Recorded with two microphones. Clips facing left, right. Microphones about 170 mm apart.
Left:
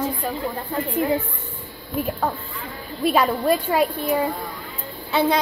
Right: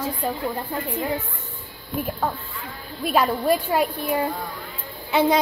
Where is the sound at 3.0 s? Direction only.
Centre (ahead or behind).